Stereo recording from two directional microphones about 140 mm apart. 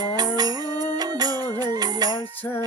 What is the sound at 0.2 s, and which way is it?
Music, 30° right (ahead or behind).